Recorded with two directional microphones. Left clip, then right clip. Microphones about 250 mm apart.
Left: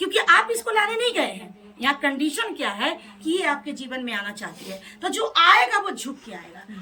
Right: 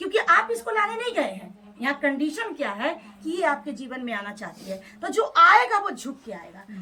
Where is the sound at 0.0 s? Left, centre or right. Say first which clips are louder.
Left 2 dB; centre.